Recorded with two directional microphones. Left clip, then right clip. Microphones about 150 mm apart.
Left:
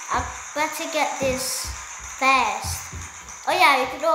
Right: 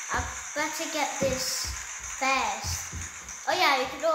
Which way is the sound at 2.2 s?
20° left (ahead or behind).